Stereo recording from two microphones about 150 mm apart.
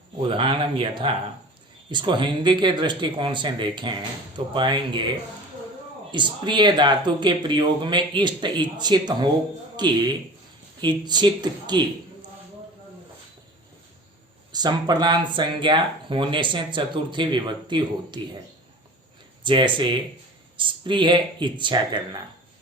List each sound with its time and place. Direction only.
0.2 s speech: 35° right (ahead or behind)
14.5 s speech: 30° right (ahead or behind)
19.4 s speech: 35° right (ahead or behind)